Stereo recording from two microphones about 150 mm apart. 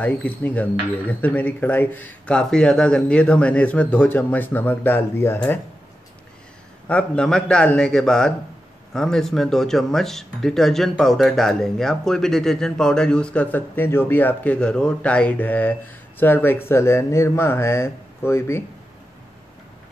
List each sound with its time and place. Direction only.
0.0 s speech: 10° left (ahead or behind)
6.9 s speech: 5° left (ahead or behind)